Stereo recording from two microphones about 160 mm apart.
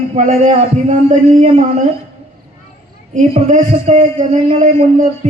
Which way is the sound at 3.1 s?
50° right (ahead or behind).